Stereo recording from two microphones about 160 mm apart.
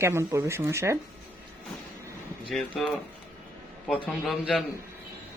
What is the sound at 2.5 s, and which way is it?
A man's voice, centre (ahead or behind).